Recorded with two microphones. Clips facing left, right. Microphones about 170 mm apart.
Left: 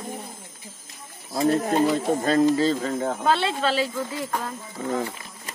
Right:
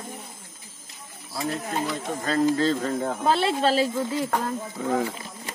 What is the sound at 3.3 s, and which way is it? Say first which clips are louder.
Speech: right 3 dB; 35° right (ahead or behind).